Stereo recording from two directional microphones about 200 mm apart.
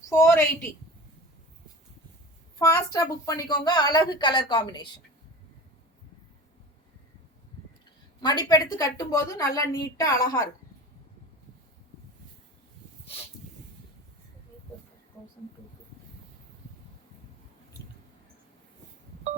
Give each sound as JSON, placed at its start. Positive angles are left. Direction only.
{"t": 0.1, "sound": "a woman's voice", "side_deg": 15}
{"t": 2.6, "sound": "a woman's voice", "side_deg": 20}
{"t": 8.2, "sound": "a woman's voice", "side_deg": 20}